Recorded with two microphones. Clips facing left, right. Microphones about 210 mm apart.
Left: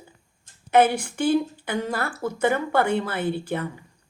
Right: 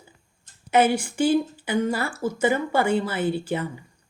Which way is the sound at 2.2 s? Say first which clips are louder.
Right 1 dB; 65° left (ahead or behind).